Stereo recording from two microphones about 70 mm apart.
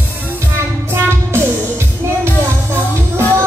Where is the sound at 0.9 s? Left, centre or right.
Right.